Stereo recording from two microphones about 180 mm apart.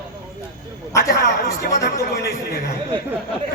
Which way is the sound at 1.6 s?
60° left (ahead or behind).